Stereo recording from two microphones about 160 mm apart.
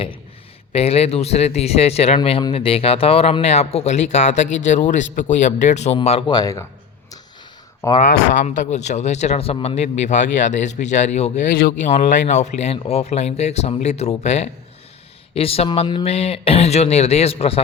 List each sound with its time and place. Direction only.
0.7 s speech: 40° left (ahead or behind); by 6.7 s 20° left (ahead or behind)
8.0 s speech: 55° left (ahead or behind); by 17.6 s 35° left (ahead or behind)